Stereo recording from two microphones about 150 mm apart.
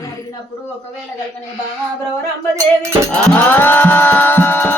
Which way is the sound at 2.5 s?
20° right (ahead or behind).